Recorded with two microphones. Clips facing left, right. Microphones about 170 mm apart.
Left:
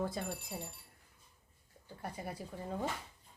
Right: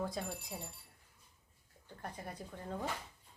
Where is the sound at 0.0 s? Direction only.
Centre (ahead or behind).